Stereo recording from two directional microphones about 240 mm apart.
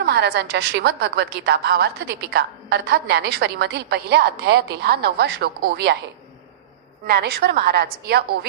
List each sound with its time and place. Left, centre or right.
0.0 s a woman's voice: right
7.1 s a woman's voice: right